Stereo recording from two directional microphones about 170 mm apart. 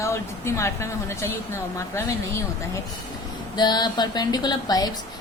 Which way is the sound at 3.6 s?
25° left (ahead or behind).